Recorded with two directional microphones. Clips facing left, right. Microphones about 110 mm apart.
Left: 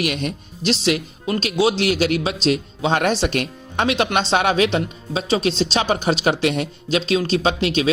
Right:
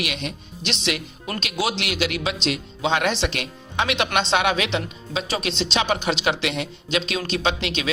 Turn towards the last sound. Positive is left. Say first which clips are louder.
# left 5 dB
turn(degrees=35)  # may be behind; listen again after turning